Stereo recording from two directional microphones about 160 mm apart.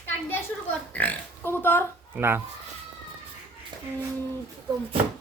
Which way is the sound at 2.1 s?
15° right (ahead or behind).